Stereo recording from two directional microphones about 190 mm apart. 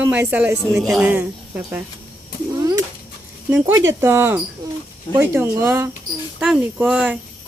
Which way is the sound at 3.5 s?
10° right (ahead or behind).